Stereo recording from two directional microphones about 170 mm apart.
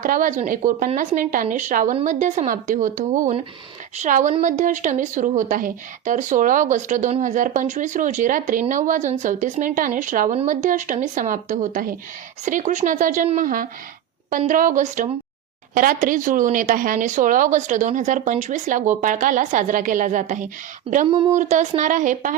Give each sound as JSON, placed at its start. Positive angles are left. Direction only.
{"t": 0.0, "sound": "speech", "side_deg": -50}
{"t": 21.1, "sound": "speech", "side_deg": -30}
{"t": 21.3, "sound": "speech", "side_deg": -45}